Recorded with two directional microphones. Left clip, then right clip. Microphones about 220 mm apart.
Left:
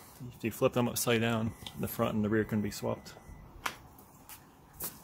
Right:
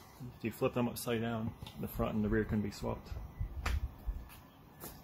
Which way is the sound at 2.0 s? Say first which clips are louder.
Left 4 dB; 30° left (ahead or behind).